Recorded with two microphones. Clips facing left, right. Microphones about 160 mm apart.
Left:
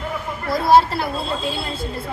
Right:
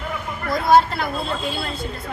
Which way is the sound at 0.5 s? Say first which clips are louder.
Left 1 dB; 30° left (ahead or behind).